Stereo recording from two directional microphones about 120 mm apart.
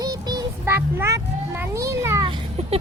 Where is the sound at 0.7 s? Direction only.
15° right (ahead or behind).